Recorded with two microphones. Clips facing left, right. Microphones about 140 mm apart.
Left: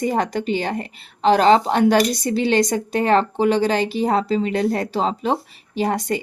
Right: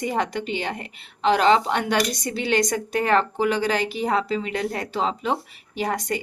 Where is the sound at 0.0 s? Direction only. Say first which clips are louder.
Left 4 dB; 40° left (ahead or behind).